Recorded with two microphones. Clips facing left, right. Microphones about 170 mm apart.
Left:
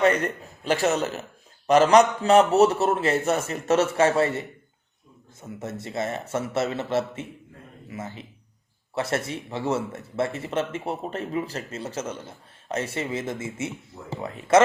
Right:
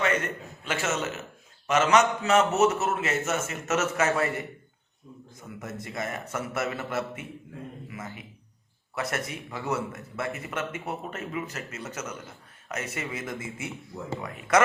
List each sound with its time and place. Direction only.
0.0 s a man's voice: 35° left (ahead or behind)